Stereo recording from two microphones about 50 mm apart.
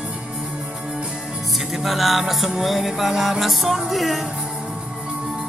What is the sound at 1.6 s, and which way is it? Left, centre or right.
Music, centre.